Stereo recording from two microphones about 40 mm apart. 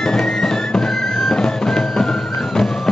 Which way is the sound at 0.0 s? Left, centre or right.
Centre.